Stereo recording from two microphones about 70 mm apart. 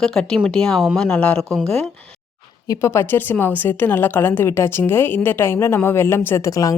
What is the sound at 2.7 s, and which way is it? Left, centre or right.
A woman's voice, left.